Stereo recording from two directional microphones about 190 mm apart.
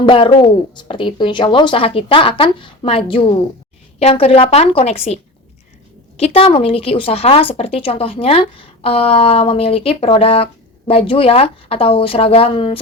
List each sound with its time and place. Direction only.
0.0 s speech: 25° left (ahead or behind)